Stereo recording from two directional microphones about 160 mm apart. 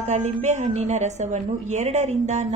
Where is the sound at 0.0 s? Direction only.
45° right (ahead or behind).